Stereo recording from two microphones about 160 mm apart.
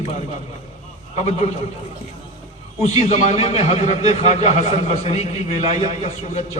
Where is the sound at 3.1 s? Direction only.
40° left (ahead or behind).